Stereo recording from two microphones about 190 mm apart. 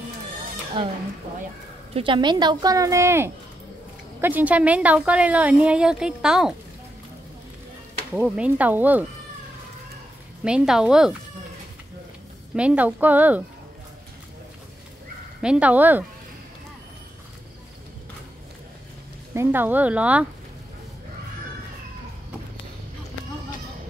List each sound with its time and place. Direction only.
2.0 s a woman's voice: 25° right (ahead or behind); by 6.5 s 5° right (ahead or behind)
8.1 s a woman's voice: 5° right (ahead or behind)
10.4 s speech: 5° right (ahead or behind)
12.5 s a woman's voice: 5° right (ahead or behind)
15.4 s a woman's voice: 5° right (ahead or behind)
19.3 s a woman's voice: 10° right (ahead or behind)